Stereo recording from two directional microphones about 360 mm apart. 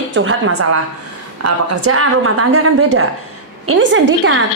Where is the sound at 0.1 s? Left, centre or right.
Right.